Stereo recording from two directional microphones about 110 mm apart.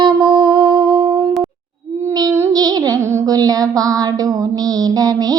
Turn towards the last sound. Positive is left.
turn(degrees=-35)  # may be behind; listen again after turning